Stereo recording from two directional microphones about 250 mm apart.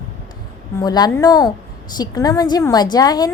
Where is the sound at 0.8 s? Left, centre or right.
Centre.